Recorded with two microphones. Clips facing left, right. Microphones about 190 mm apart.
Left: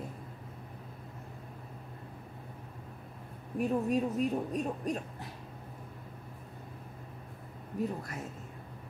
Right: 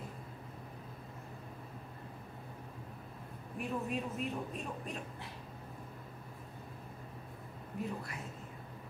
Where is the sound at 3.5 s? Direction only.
40° left (ahead or behind).